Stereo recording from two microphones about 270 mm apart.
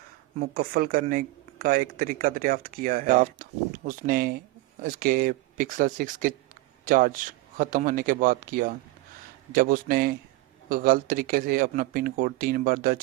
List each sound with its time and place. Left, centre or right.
0.3 s speech: right